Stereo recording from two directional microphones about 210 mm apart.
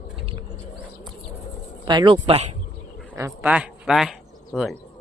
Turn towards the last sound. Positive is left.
turn(degrees=0)  # may be behind; listen again after turning